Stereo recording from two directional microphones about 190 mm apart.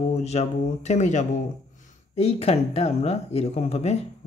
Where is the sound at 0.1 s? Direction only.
35° left (ahead or behind).